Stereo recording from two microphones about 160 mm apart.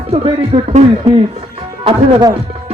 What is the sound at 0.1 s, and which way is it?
Speech, 40° right (ahead or behind).